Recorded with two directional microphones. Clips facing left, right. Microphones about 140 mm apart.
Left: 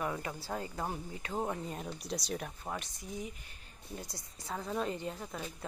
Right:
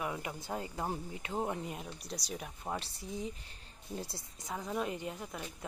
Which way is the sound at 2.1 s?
Centre (ahead or behind).